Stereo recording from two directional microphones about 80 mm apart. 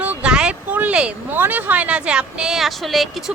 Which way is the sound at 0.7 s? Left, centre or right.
Right.